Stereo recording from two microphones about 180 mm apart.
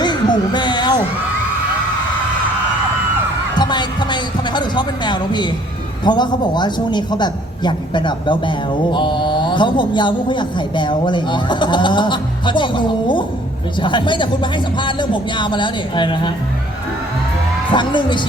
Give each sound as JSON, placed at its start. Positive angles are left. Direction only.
{"t": 0.0, "sound": "a sound", "side_deg": 25}
{"t": 3.6, "sound": "a man's voice", "side_deg": 25}
{"t": 17.7, "sound": "a man's voice", "side_deg": 25}